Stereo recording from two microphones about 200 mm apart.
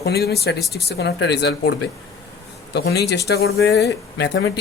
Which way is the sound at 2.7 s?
55° left (ahead or behind).